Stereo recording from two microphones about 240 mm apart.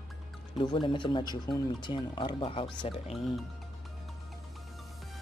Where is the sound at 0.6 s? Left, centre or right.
Left.